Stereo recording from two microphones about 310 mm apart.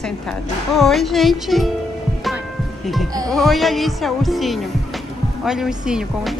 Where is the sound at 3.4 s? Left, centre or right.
Centre.